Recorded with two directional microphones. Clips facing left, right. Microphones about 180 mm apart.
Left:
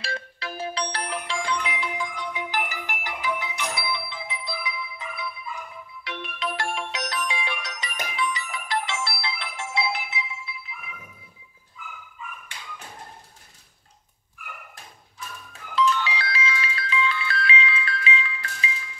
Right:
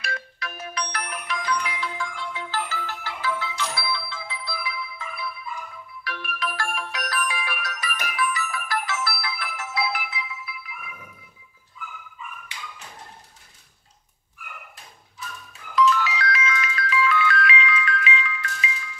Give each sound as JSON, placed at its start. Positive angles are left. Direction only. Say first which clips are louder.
{"t": 0.0, "sound": "music", "louder": "left 1 dB", "side_deg": 30}
{"t": 6.0, "sound": "ringtone", "louder": "even", "side_deg": 25}
{"t": 15.7, "sound": "music", "louder": "right 3 dB", "side_deg": 30}